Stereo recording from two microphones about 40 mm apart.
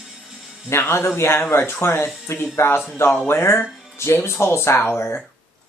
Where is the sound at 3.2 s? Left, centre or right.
Left.